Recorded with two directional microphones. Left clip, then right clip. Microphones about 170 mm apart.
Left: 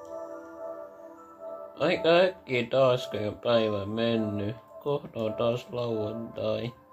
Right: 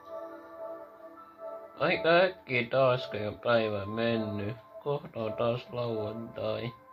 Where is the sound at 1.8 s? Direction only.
10° left (ahead or behind).